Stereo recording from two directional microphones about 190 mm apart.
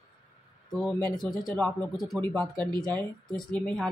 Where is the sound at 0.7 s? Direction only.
Centre (ahead or behind).